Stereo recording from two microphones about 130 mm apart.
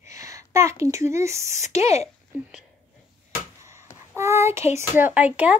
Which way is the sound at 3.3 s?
20° right (ahead or behind).